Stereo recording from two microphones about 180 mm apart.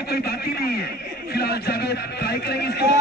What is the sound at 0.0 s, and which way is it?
A man's voice, 60° left (ahead or behind).